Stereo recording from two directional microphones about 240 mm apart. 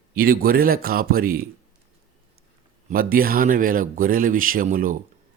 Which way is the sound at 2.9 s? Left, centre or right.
Right.